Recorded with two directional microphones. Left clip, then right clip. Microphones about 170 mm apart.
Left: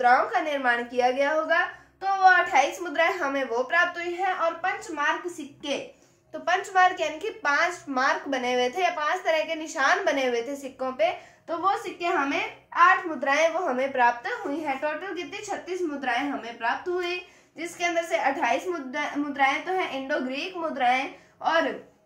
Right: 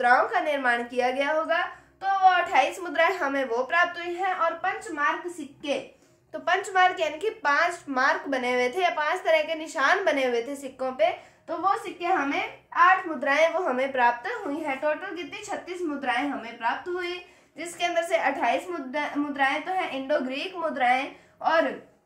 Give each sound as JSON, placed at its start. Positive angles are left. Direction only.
{"t": 0.0, "sound": "a woman's voice", "side_deg": -40}
{"t": 4.2, "sound": "a child's voice", "side_deg": -20}
{"t": 6.4, "sound": "a child's voice", "side_deg": -30}
{"t": 13.3, "sound": "a child's voice", "side_deg": -30}
{"t": 17.6, "sound": "a woman's voice", "side_deg": -35}